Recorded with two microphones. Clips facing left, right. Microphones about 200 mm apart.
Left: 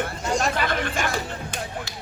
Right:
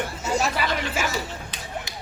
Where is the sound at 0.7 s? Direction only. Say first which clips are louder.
Left 1 dB; 50° left (ahead or behind).